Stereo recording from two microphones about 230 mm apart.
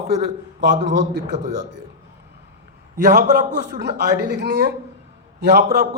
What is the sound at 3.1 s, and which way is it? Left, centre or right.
A man's voice, right.